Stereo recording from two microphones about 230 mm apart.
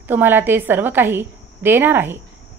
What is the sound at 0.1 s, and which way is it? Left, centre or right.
A woman's voice, centre.